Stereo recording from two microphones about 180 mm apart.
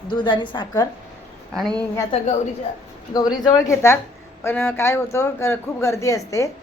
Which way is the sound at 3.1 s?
20° left (ahead or behind).